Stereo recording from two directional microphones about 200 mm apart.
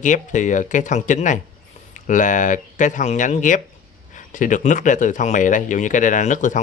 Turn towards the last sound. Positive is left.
turn(degrees=40)  # may be behind; listen again after turning